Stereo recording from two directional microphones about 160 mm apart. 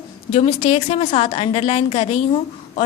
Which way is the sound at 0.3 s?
35° left (ahead or behind).